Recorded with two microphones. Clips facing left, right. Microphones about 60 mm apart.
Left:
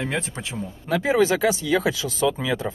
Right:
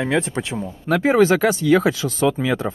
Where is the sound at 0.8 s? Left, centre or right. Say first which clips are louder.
Right 4 dB; right.